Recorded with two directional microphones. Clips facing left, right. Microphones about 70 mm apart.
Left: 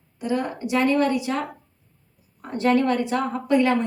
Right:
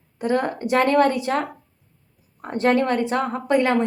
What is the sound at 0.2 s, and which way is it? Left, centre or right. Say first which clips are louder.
A woman's voice: right 3 dB; right.